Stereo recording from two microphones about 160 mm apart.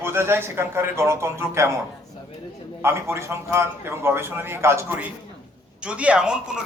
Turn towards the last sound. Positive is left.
turn(degrees=-5)  # may be behind; listen again after turning